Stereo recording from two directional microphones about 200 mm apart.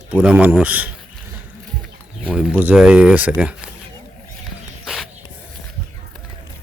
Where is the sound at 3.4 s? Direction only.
5° right (ahead or behind).